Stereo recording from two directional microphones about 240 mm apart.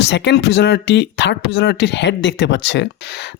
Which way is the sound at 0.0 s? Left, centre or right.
Left.